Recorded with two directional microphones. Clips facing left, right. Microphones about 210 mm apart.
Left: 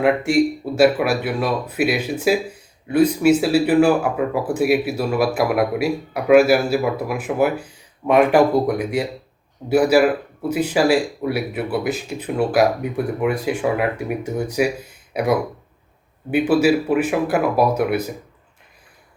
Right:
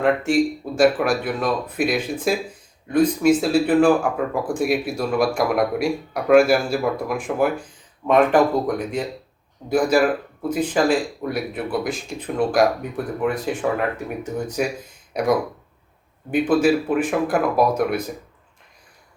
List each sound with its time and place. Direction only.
0.0 s speech: 10° left (ahead or behind)
16.3 s speech: 10° left (ahead or behind)